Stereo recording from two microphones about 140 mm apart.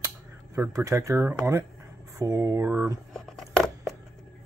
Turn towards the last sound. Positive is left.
turn(degrees=0)  # may be behind; listen again after turning